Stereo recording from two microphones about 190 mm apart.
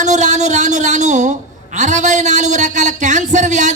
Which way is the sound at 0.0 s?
40° right (ahead or behind).